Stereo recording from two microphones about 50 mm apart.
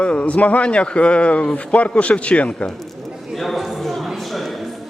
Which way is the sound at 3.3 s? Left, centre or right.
Centre.